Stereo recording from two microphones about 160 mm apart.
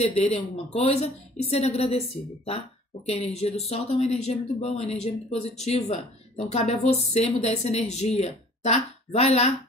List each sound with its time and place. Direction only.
0.0 s a woman's voice: 40° left (ahead or behind)